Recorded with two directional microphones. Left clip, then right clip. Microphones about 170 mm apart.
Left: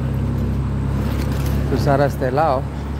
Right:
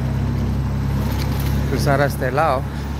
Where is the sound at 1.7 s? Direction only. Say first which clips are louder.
Left 1 dB; 25° left (ahead or behind).